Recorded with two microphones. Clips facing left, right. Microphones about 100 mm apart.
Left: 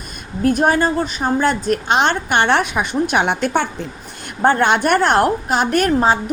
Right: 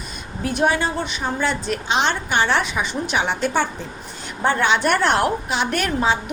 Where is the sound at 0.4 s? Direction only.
45° left (ahead or behind).